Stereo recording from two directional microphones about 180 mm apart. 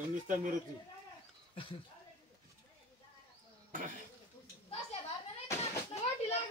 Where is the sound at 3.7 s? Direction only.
45° right (ahead or behind).